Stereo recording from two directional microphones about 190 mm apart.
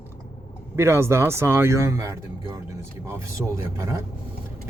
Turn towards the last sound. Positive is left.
turn(degrees=-15)  # may be behind; listen again after turning